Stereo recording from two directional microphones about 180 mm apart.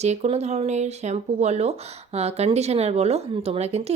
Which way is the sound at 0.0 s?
40° right (ahead or behind).